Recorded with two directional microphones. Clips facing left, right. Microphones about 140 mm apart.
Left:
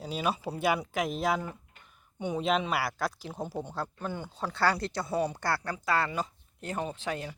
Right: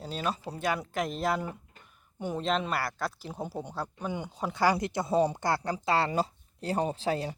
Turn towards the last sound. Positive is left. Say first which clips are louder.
# right 5 dB
turn(degrees=-35)  # may be behind; listen again after turning